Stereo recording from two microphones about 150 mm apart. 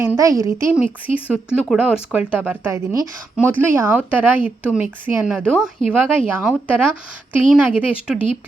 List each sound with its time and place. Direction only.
0.0 s speech: 20° right (ahead or behind)
1.3 s speech: 5° right (ahead or behind)